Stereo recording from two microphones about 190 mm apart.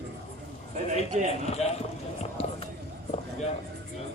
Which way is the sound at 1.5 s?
35° left (ahead or behind).